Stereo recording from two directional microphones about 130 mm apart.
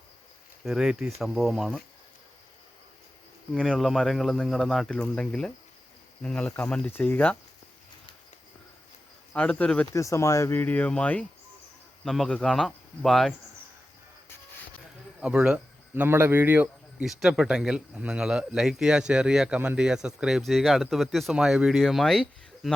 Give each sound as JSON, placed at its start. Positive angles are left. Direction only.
{"t": 0.6, "sound": "speech", "side_deg": -5}
{"t": 3.5, "sound": "speech", "side_deg": 0}
{"t": 9.3, "sound": "speech", "side_deg": 10}
{"t": 9.9, "sound": "speech", "side_deg": 25}
{"t": 15.2, "sound": "a man's voice", "side_deg": -5}
{"t": 17.1, "sound": "speech", "side_deg": -5}